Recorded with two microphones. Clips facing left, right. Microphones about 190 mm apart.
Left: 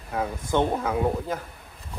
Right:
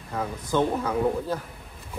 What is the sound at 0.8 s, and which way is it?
Speech, 10° left (ahead or behind).